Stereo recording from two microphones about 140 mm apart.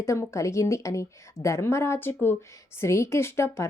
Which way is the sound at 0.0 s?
20° left (ahead or behind).